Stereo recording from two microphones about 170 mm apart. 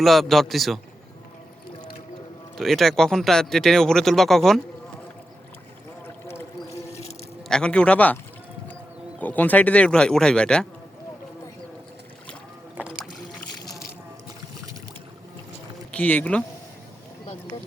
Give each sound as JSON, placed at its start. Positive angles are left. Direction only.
{"t": 0.0, "sound": "speech", "side_deg": 0}
{"t": 2.6, "sound": "speech", "side_deg": 0}
{"t": 6.7, "sound": "boat", "side_deg": 40}
{"t": 7.4, "sound": "speech", "side_deg": 5}
{"t": 9.2, "sound": "speech", "side_deg": 10}
{"t": 12.7, "sound": "boat", "side_deg": -5}
{"t": 15.9, "sound": "speech", "side_deg": 10}